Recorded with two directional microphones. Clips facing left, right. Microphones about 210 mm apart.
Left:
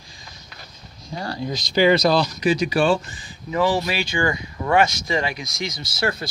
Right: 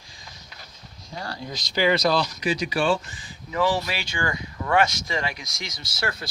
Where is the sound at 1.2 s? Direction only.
25° left (ahead or behind); by 3.0 s 40° left (ahead or behind).